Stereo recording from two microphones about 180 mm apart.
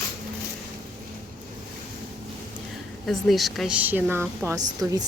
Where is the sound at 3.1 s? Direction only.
Centre (ahead or behind).